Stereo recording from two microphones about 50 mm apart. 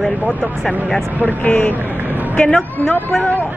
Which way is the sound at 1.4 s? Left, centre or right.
Left.